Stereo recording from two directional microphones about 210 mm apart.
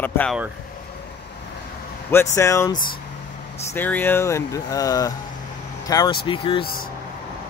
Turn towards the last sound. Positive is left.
turn(degrees=25)  # may be behind; listen again after turning